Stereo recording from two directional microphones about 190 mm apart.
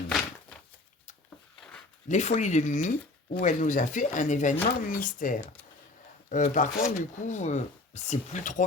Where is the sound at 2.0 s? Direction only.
40° left (ahead or behind).